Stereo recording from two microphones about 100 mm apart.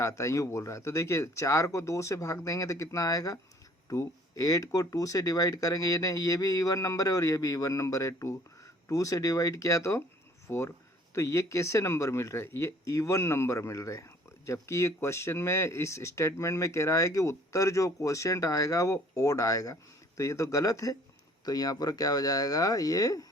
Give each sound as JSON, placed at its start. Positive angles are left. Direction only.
{"t": 0.0, "sound": "speech", "side_deg": 30}